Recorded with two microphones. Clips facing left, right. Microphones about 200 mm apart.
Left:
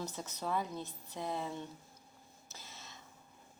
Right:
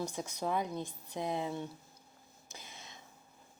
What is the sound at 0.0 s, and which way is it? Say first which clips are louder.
A woman's voice: right 4 dB; 15° right (ahead or behind).